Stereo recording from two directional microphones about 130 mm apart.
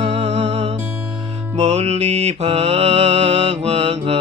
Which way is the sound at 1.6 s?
55° right (ahead or behind).